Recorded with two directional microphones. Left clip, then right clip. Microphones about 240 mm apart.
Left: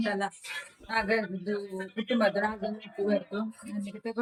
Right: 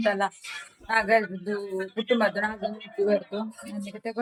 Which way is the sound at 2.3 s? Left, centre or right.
Centre.